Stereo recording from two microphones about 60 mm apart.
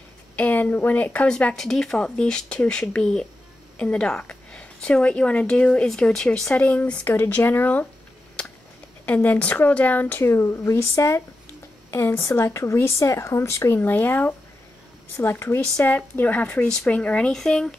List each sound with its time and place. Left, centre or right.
0.4 s speech: left
1.6 s a woman's voice: centre
6.5 s speech: left
9.0 s speech: left
10.3 s speech: left
13.7 s speech: left
15.1 s speech: left
15.8 s speech: left
16.4 s speech: centre
17.3 s speech: centre